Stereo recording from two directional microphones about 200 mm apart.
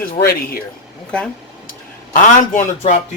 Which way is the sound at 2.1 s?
40° left (ahead or behind).